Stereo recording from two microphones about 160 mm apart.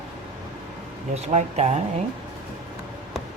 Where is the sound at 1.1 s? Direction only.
45° right (ahead or behind).